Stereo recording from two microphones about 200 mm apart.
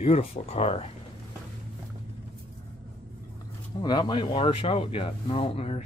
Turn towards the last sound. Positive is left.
turn(degrees=30)  # may be behind; listen again after turning